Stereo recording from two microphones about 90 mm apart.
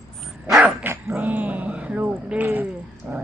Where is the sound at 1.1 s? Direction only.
20° right (ahead or behind).